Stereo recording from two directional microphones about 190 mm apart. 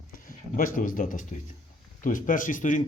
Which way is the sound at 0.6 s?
45° left (ahead or behind).